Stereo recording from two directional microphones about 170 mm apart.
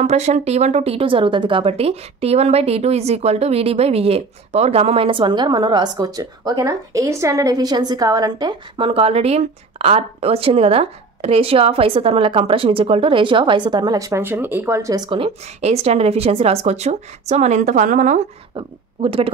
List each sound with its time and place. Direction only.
0.0 s speech: 40° right (ahead or behind); by 15.0 s 20° right (ahead or behind)
15.0 s speech: 35° right (ahead or behind)
18.6 s speech: 35° right (ahead or behind)